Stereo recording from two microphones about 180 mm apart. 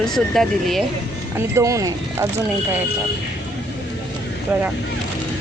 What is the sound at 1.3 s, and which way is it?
Speech, 15° right (ahead or behind).